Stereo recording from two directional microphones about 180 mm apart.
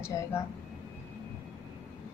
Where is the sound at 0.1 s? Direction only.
15° left (ahead or behind).